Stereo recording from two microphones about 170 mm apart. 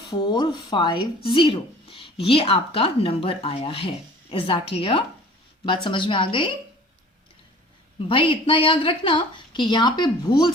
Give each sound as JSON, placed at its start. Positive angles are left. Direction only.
{"t": 0.1, "sound": "a woman's voice", "side_deg": 25}
{"t": 7.9, "sound": "a woman's voice", "side_deg": 30}